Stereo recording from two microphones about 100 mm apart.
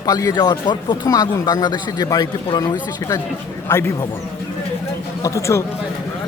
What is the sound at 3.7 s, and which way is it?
Speech, 30° left (ahead or behind).